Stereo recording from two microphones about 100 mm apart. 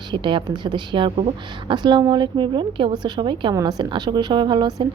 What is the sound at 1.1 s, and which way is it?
Speech, 70° right (ahead or behind).